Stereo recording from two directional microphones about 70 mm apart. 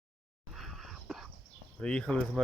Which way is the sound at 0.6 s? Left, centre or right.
Centre.